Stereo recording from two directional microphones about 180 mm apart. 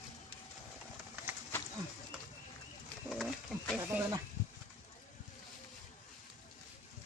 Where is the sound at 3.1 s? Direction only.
Centre (ahead or behind).